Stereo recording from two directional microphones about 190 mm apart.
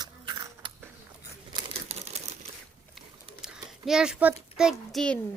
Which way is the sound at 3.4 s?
5° right (ahead or behind).